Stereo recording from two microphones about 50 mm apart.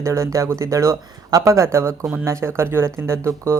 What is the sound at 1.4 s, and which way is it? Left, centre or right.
Speech, right.